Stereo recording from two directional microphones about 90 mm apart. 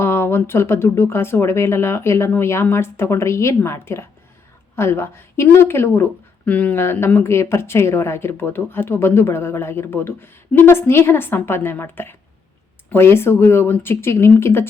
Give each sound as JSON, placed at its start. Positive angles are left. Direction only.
{"t": 0.0, "sound": "a woman's voice", "side_deg": 25}